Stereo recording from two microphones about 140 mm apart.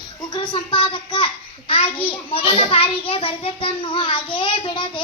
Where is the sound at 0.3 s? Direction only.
35° left (ahead or behind).